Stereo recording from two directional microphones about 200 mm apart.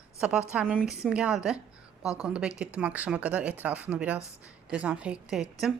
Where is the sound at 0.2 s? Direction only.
5° right (ahead or behind).